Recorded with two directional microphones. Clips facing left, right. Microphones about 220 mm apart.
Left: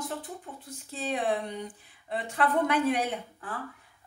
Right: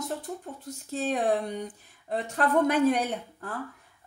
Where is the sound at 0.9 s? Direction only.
45° right (ahead or behind).